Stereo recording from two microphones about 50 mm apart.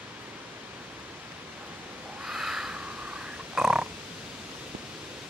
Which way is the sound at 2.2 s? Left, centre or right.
Centre.